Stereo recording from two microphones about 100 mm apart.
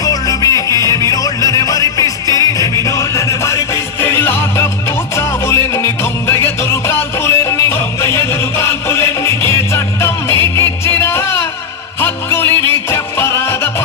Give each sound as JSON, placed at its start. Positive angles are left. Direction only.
{"t": 0.0, "sound": "music", "side_deg": 40}